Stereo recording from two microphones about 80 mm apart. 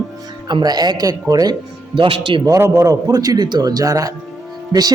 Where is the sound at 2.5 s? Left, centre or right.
Right.